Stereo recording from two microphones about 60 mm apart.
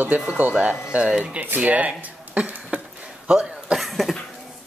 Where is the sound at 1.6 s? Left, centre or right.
Right.